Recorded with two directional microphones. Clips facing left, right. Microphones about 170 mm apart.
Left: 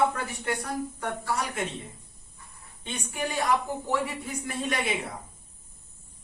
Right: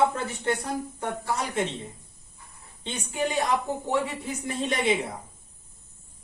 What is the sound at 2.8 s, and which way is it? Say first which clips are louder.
A woman's voice: right 4 dB; 25° right (ahead or behind).